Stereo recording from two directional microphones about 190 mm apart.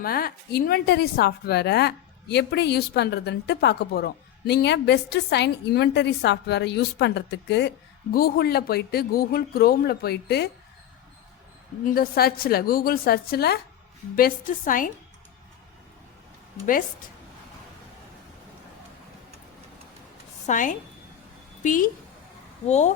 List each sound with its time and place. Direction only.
0.0 s a woman's voice: 50° left (ahead or behind)
11.9 s a woman's voice: 50° left (ahead or behind)
20.5 s a woman's voice: 45° left (ahead or behind)